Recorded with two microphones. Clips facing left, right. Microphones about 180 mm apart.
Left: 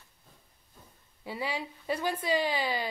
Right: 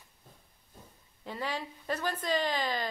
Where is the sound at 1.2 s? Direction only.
10° left (ahead or behind).